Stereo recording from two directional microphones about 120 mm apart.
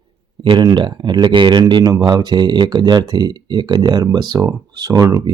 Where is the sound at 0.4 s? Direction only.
40° right (ahead or behind).